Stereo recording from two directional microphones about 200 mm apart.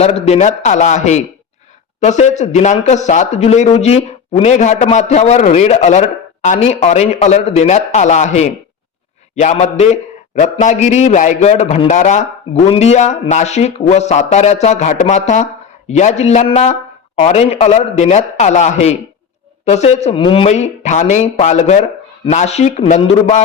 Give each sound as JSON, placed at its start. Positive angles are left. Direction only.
{"t": 0.0, "sound": "a man's voice", "side_deg": 30}